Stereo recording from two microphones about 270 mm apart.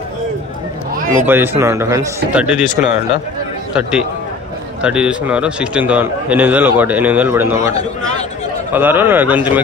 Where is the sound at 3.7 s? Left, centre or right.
Centre.